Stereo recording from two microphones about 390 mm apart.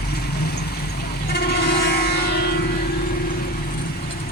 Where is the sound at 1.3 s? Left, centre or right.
Left.